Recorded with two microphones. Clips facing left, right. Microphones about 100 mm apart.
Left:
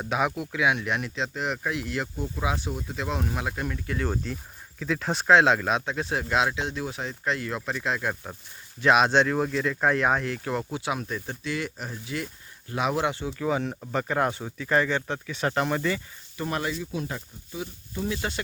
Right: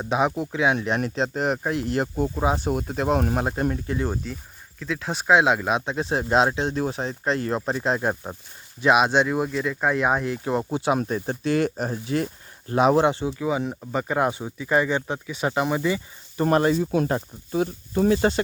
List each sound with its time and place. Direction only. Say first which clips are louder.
0.0 s speech: right 4 dB; 25° right (ahead or behind)
3.8 s speech: right 3 dB; 20° right (ahead or behind)
4.1 s speech: even; 5° right (ahead or behind); by 8.4 s 30° right (ahead or behind)
8.8 s speech: right 1 dB; 10° right (ahead or behind)
13.4 s speech: left 1 dB; 10° right (ahead or behind)
16.4 s speech: right 10 dB; 40° right (ahead or behind)